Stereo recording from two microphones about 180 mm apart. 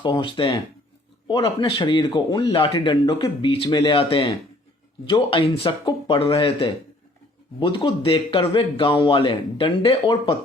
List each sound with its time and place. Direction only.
0.0 s speech: 25° left (ahead or behind)